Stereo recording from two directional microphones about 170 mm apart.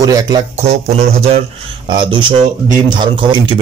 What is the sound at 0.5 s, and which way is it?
A man's voice, 40° right (ahead or behind).